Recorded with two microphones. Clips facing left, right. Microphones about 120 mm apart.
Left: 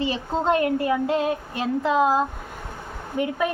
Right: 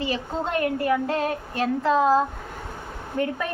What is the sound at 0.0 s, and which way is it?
A woman's voice, 25° left (ahead or behind).